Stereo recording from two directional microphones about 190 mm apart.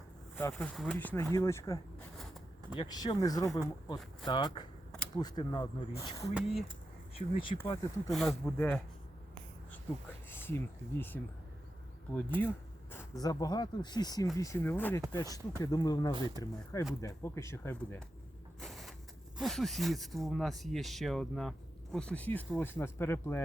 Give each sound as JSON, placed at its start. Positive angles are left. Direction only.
{"t": 0.5, "sound": "speech", "side_deg": 5}
{"t": 2.1, "sound": "a sound", "side_deg": 0}
{"t": 2.7, "sound": "speech", "side_deg": 20}
{"t": 6.3, "sound": "speech", "side_deg": 0}
{"t": 7.2, "sound": "speech", "side_deg": 30}
{"t": 8.1, "sound": "speech", "side_deg": 0}
{"t": 8.4, "sound": "speech", "side_deg": 10}
{"t": 10.2, "sound": "speech", "side_deg": 10}
{"t": 12.4, "sound": "speech", "side_deg": 10}
{"t": 16.1, "sound": "speech", "side_deg": -25}
{"t": 17.0, "sound": "speech", "side_deg": 15}
{"t": 18.6, "sound": "vehicle", "side_deg": 0}
{"t": 19.4, "sound": "speech", "side_deg": 0}